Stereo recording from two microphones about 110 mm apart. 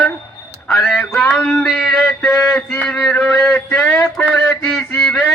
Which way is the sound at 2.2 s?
15° left (ahead or behind).